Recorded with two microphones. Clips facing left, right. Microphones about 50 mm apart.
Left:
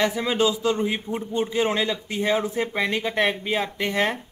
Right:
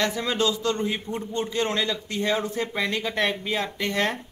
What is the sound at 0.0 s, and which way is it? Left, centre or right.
Speech, centre.